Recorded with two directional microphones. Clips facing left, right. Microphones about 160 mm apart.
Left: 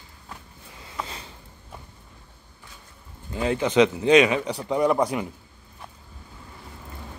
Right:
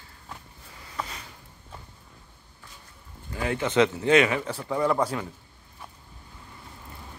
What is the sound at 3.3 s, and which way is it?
A man's voice, 20° left (ahead or behind).